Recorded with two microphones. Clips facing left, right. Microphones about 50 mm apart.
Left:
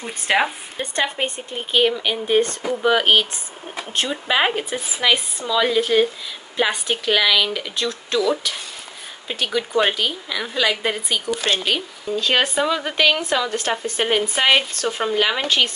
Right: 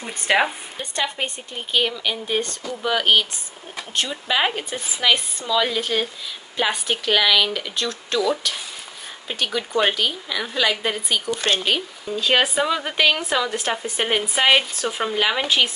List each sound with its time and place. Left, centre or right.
0.0 s speech: centre
0.7 s speech: left
4.6 s speech: centre